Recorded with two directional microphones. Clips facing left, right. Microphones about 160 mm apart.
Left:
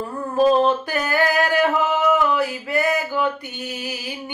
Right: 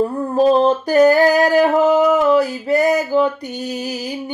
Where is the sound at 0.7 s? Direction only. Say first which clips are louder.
Right 10 dB; 40° right (ahead or behind).